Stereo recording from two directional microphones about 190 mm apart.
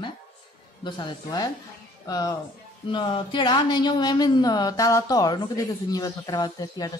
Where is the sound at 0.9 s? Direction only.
20° left (ahead or behind).